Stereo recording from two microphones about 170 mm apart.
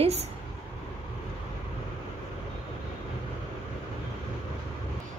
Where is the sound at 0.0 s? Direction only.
40° right (ahead or behind).